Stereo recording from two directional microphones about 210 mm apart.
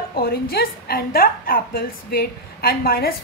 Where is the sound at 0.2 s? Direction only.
45° left (ahead or behind).